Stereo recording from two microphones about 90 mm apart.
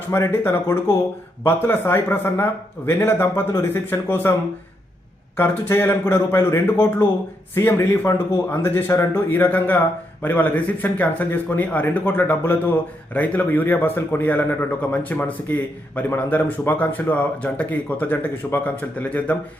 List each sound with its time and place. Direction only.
0.1 s a man's voice: 25° left (ahead or behind)
5.4 s a man's voice: 25° left (ahead or behind)